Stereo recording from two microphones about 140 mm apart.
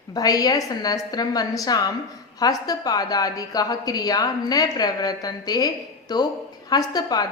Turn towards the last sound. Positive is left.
turn(degrees=30)  # may be behind; listen again after turning